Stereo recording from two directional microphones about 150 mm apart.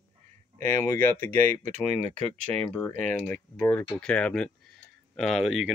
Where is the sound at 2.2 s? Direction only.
5° left (ahead or behind).